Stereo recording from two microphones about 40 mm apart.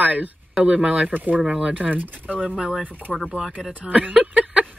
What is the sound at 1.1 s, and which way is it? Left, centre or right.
Speech, right.